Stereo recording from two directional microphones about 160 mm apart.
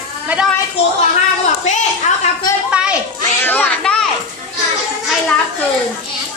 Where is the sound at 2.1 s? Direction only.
50° left (ahead or behind).